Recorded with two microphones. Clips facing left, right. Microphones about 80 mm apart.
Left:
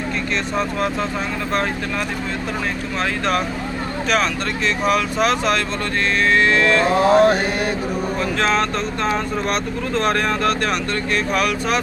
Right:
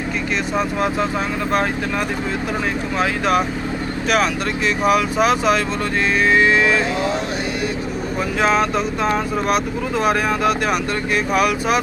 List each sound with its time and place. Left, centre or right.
3.0 s speech: centre
4.8 s speech: centre
6.8 s speech: left
8.4 s speech: centre